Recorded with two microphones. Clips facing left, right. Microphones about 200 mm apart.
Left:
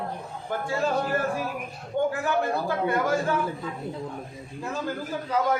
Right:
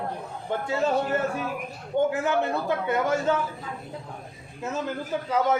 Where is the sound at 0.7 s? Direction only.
20° right (ahead or behind).